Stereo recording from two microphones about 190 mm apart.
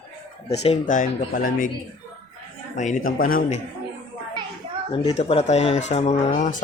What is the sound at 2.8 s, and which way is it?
Speech, 45° left (ahead or behind).